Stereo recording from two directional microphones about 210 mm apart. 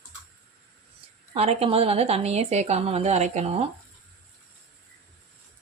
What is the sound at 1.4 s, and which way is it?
A woman's voice, 30° right (ahead or behind).